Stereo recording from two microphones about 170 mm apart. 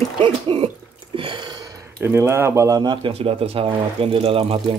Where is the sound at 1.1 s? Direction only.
30° right (ahead or behind).